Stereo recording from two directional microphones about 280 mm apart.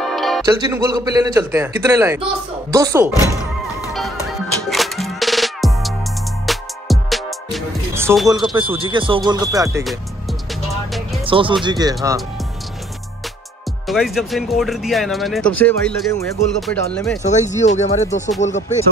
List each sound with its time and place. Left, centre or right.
0.1 s music: centre
0.5 s a man's voice: centre
4.6 s music: centre
8.5 s a man's voice: centre
10.5 s music: centre
11.2 s a man's voice: centre
13.8 s speech: centre
17.2 s speech: left